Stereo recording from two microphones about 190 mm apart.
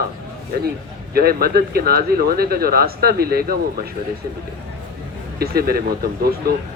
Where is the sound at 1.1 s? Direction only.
55° right (ahead or behind).